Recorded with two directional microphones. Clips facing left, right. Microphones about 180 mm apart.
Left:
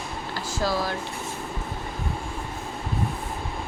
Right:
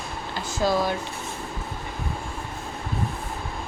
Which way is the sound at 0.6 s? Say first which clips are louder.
Right 4 dB; 20° right (ahead or behind).